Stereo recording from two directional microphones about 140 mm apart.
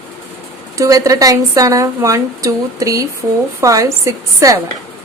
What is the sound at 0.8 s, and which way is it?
A woman's voice, 25° right (ahead or behind).